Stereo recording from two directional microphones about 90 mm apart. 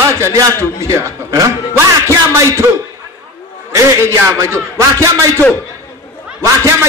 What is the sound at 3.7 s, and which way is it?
A man's voice, 30° right (ahead or behind).